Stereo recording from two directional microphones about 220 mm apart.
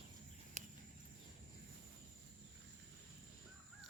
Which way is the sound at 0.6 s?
30° right (ahead or behind).